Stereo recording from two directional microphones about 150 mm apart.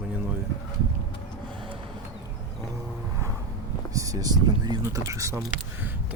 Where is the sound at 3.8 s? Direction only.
20° right (ahead or behind).